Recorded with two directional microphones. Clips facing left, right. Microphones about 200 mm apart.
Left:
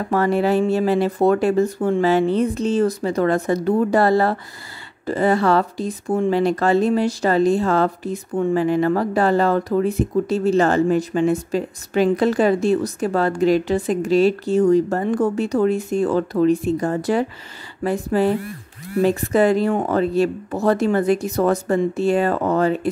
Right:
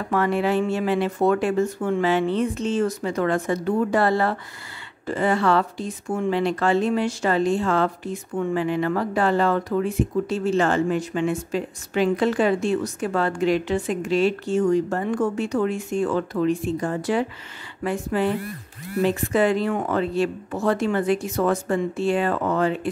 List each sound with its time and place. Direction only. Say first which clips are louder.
0.1 s speech: left 3 dB; 40° left (ahead or behind)